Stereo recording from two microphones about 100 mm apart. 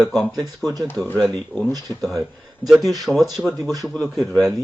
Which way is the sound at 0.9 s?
20° left (ahead or behind).